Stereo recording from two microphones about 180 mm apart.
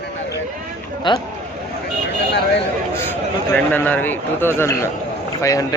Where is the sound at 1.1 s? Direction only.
25° left (ahead or behind).